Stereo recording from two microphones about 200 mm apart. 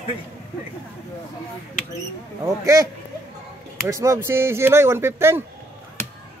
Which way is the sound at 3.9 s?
15° right (ahead or behind).